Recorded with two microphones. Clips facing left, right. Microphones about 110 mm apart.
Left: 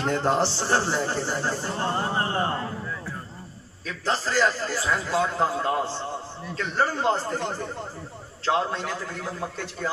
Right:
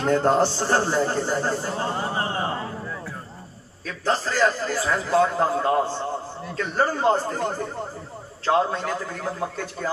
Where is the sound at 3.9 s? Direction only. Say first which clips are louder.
Right 2 dB; 50° right (ahead or behind).